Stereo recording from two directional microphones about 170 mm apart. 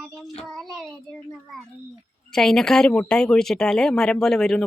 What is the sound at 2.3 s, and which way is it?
Speech, centre (ahead or behind).